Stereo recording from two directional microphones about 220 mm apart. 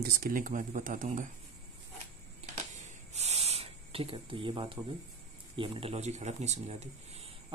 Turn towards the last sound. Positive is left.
turn(degrees=-30)  # may be behind; listen again after turning